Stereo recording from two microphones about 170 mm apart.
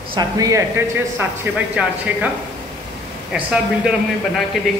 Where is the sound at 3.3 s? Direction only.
5° right (ahead or behind).